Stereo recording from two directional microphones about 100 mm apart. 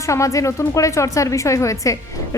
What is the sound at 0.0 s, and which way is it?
Speech, 30° left (ahead or behind).